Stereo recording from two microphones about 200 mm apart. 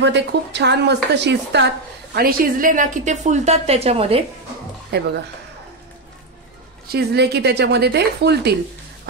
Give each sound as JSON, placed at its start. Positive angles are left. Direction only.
{"t": 0.0, "sound": "speech", "side_deg": -60}
{"t": 2.1, "sound": "a woman's voice", "side_deg": -50}
{"t": 6.9, "sound": "speech", "side_deg": -55}